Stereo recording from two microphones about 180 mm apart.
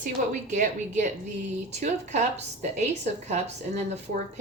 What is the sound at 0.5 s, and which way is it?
A woman's voice, 45° right (ahead or behind).